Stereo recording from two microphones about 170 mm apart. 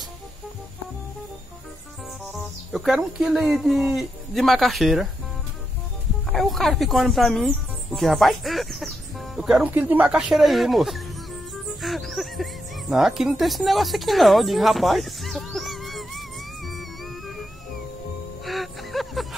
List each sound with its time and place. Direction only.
2.3 s speech: centre (ahead or behind)
6.3 s speech: centre (ahead or behind)
11.8 s music: centre (ahead or behind)
18.4 s music: centre (ahead or behind)